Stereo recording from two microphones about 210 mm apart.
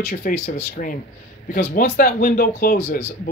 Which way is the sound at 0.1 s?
40° left (ahead or behind).